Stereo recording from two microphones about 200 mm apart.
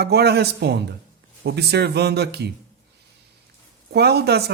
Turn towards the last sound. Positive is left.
turn(degrees=-55)  # may be behind; listen again after turning